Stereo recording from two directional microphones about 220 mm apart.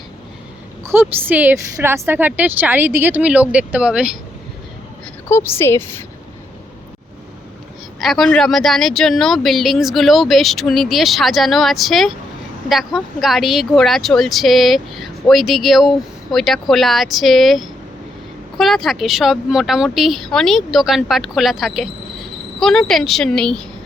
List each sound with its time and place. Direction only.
0.9 s a woman's voice: 10° right (ahead or behind)
5.3 s a woman's voice: 10° left (ahead or behind)
8.0 s speech: centre (ahead or behind)